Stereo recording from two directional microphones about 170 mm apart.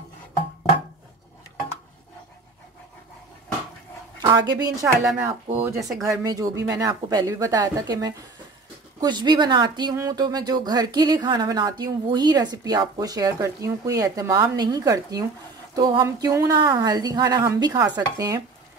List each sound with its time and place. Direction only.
4.2 s speech: 25° right (ahead or behind)
4.8 s speech: 10° right (ahead or behind)